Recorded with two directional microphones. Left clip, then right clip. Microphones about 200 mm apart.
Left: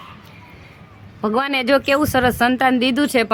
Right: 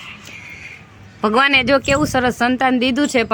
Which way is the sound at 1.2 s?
Centre (ahead or behind).